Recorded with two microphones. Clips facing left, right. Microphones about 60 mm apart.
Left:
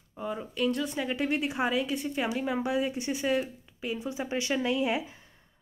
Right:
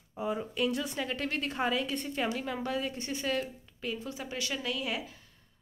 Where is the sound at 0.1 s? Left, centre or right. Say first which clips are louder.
Right 1 dB; centre.